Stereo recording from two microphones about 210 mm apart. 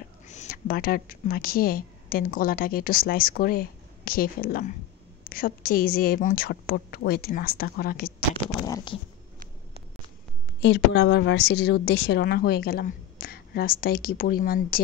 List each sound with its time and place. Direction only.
0.3 s a woman's voice: 40° left (ahead or behind)
8.5 s a sound: 15° left (ahead or behind)
10.6 s a woman's voice: 55° left (ahead or behind)